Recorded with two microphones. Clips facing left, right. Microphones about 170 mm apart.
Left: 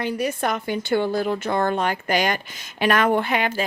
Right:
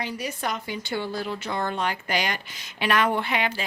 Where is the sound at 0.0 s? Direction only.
55° left (ahead or behind).